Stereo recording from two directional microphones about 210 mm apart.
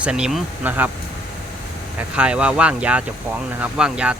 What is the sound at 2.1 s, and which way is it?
Speech, 5° right (ahead or behind).